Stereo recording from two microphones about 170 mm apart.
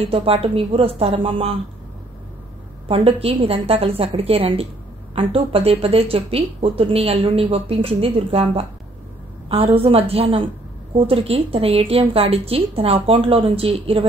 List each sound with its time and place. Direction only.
0.1 s speech: 35° right (ahead or behind)
2.9 s speech: 35° right (ahead or behind)